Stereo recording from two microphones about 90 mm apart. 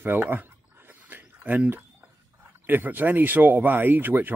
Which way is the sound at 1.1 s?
20° right (ahead or behind).